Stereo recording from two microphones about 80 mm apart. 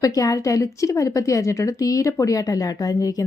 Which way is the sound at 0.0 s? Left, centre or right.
Left.